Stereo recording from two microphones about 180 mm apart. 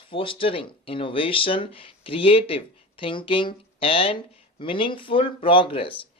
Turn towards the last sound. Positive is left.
turn(degrees=30)  # may be behind; listen again after turning